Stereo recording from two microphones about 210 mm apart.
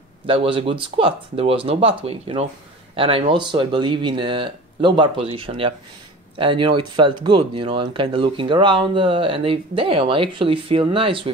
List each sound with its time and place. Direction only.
0.3 s speech: 25° right (ahead or behind)